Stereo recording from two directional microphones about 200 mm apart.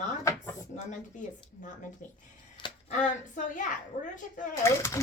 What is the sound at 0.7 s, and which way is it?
Speech, 35° left (ahead or behind).